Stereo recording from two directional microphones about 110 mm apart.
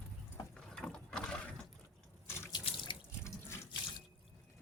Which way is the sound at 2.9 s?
50° left (ahead or behind).